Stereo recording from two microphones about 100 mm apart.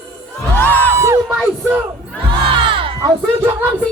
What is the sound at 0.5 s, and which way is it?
Music, 20° left (ahead or behind).